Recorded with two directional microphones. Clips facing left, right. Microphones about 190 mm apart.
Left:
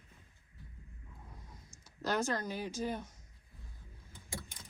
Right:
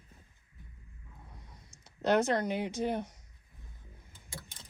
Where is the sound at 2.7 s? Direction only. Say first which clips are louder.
Right 5 dB; 70° right (ahead or behind).